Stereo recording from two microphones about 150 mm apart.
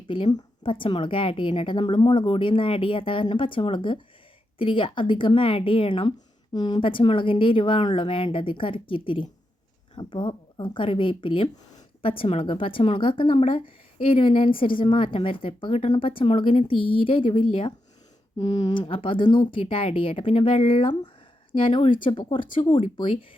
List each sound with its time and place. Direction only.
0.1 s a woman's voice: 30° left (ahead or behind)